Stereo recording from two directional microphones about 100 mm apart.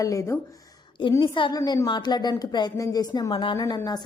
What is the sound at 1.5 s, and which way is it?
A woman's voice, 45° left (ahead or behind).